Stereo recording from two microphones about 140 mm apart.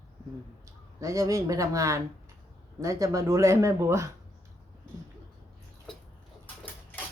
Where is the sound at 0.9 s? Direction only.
20° right (ahead or behind).